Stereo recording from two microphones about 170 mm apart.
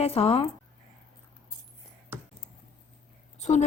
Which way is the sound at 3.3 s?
45° left (ahead or behind).